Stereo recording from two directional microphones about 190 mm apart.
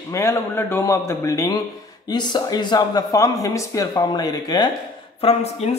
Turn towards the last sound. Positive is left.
turn(degrees=35)  # may be behind; listen again after turning